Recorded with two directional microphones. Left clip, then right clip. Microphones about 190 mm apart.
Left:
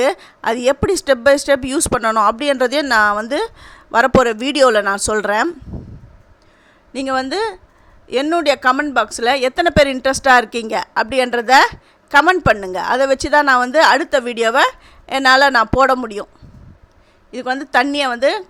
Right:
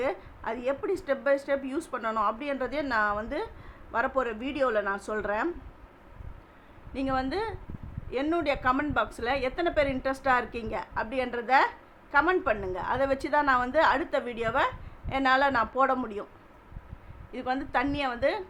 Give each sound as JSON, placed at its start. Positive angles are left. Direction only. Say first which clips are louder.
{"t": 0.0, "sound": "a woman's voice", "louder": "left 14 dB", "side_deg": 55}
{"t": 6.9, "sound": "a woman's voice", "louder": "left 11 dB", "side_deg": 50}
{"t": 17.3, "sound": "a woman's voice", "louder": "left 13 dB", "side_deg": 45}